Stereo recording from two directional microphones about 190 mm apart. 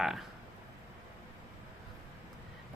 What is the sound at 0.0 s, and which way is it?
Speech, centre (ahead or behind).